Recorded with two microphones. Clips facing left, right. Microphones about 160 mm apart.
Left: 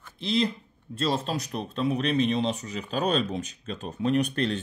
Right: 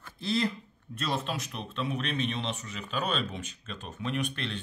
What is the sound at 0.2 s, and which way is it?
Speech, 20° left (ahead or behind).